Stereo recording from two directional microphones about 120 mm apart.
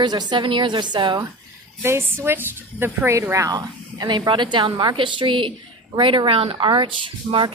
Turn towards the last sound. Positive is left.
turn(degrees=-45)  # may be behind; listen again after turning